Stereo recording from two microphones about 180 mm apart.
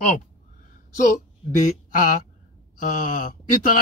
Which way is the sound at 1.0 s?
45° left (ahead or behind).